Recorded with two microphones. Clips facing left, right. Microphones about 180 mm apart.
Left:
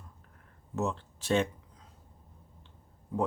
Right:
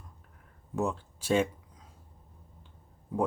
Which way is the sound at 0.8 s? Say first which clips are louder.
Right 1 dB; 10° right (ahead or behind).